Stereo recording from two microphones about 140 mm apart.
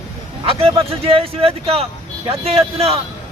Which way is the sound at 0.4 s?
45° right (ahead or behind).